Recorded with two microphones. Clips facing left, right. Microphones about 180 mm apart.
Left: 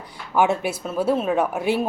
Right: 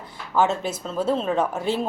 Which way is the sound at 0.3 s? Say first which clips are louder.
Left 2 dB; 15° left (ahead or behind).